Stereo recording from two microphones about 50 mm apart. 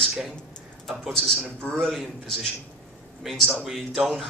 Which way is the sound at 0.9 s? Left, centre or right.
Centre.